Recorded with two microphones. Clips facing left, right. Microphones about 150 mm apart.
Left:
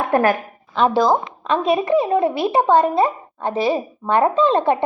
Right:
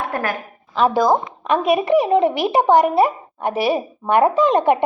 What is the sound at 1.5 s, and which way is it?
A woman's voice, 15° right (ahead or behind).